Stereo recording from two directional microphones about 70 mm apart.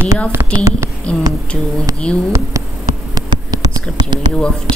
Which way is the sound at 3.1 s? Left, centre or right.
Right.